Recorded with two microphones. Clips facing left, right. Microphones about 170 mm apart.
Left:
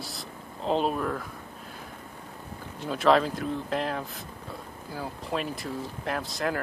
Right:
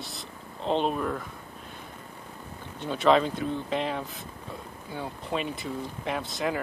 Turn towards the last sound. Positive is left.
turn(degrees=0)  # may be behind; listen again after turning